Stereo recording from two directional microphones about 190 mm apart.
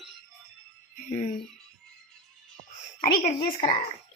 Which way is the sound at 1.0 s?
40° left (ahead or behind).